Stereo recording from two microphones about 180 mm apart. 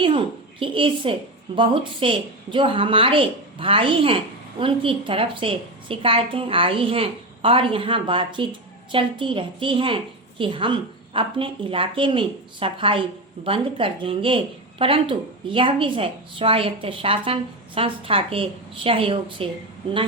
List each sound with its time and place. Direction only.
0.6 s a woman's voice: 30° right (ahead or behind)